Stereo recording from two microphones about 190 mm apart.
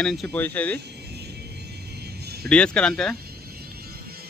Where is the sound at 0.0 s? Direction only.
Centre (ahead or behind).